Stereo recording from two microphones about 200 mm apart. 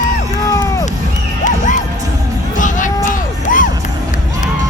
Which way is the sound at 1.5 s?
40° left (ahead or behind).